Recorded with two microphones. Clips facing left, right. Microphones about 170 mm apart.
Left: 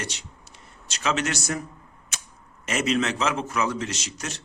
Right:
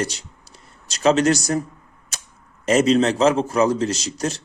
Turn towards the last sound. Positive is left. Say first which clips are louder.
# right 9 dB
turn(degrees=-35)  # may be behind; listen again after turning